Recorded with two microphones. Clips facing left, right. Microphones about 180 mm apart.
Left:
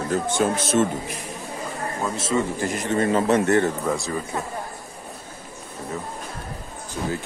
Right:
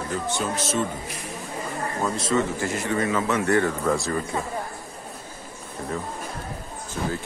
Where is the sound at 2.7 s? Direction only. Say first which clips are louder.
Left 1 dB; 20° left (ahead or behind).